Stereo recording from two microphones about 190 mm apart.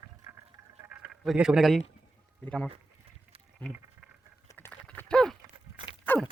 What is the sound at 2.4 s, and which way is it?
Speech, 5° left (ahead or behind).